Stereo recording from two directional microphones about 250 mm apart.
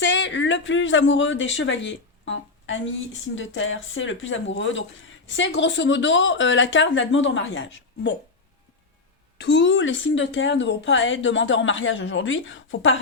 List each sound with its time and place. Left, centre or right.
0.0 s speech: left
9.4 s speech: left